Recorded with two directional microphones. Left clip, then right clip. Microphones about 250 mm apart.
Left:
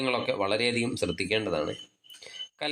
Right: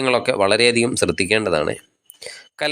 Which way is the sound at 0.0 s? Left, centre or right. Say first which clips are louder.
Right 10 dB; right.